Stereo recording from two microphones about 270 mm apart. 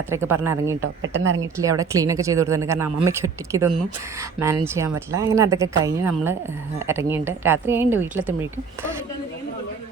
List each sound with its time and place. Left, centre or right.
0.1 s speech: centre
0.8 s a woman's voice: right
1.5 s speech: centre